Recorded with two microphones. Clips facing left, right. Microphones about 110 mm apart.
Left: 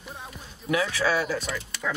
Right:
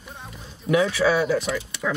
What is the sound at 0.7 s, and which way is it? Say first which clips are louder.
Speech: right 5 dB; 25° right (ahead or behind).